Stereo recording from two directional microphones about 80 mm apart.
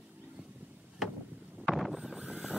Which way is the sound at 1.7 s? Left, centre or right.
Centre.